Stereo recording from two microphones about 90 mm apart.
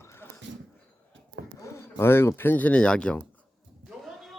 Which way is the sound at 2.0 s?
25° left (ahead or behind).